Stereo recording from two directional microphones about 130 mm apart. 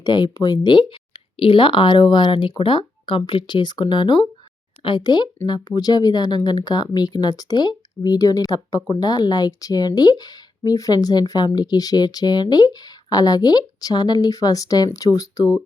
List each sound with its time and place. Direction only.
0.0 s speech: 35° left (ahead or behind)